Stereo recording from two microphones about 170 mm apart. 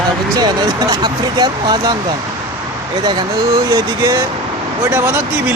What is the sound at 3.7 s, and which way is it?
Speech, 20° right (ahead or behind).